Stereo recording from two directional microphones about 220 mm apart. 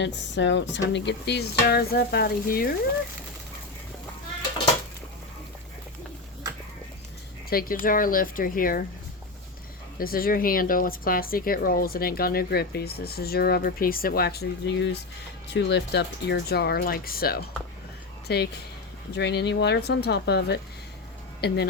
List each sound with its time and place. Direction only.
0.0 s speech: 55° left (ahead or behind)
7.5 s speech: 40° left (ahead or behind)
10.0 s speech: 40° left (ahead or behind)